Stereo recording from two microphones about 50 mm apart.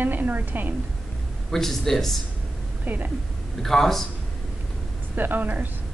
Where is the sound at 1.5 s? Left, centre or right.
Centre.